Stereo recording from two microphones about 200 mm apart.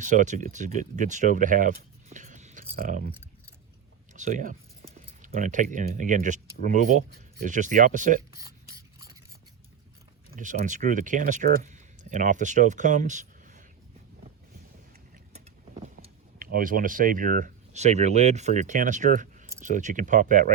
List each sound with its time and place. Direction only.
0.0 s speech: 40° right (ahead or behind)
4.1 s speech: 40° right (ahead or behind)
10.3 s speech: 40° right (ahead or behind)
16.4 s speech: 45° right (ahead or behind)